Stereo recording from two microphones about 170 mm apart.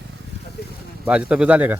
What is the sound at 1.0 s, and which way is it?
Speech, 5° right (ahead or behind).